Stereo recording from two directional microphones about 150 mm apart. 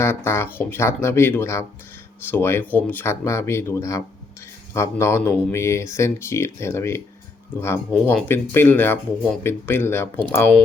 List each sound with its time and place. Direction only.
0.0 s speech: 15° left (ahead or behind)